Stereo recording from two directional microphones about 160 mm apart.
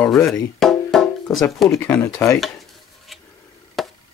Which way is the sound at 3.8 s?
Centre (ahead or behind).